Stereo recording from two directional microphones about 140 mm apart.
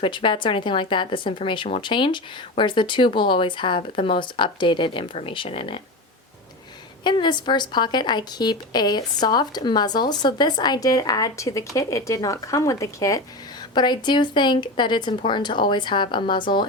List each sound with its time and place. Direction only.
0.0 s speech: 35° left (ahead or behind)
7.0 s a woman's voice: 30° left (ahead or behind)